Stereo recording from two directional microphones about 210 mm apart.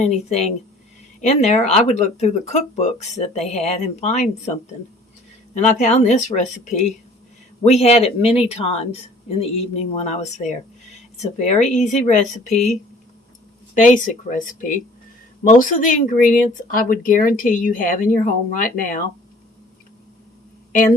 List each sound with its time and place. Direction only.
0.0 s a woman's voice: 30° left (ahead or behind)
5.5 s a woman's voice: 35° left (ahead or behind)
13.7 s a woman's voice: 40° left (ahead or behind)